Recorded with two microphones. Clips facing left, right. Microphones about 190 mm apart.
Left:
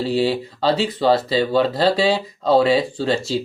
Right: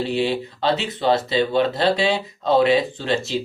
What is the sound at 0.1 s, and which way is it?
Speech, 40° left (ahead or behind).